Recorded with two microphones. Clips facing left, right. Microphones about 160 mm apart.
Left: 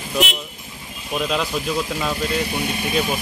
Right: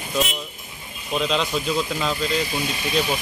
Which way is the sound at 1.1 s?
5° left (ahead or behind).